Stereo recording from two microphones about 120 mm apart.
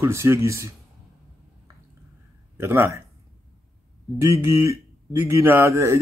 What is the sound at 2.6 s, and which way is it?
Speech, 20° right (ahead or behind).